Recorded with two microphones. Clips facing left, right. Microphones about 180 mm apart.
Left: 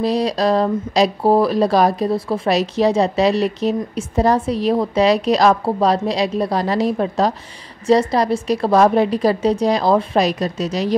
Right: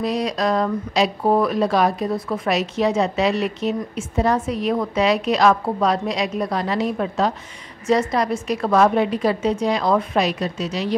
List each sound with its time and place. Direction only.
0.0 s speech: 35° left (ahead or behind)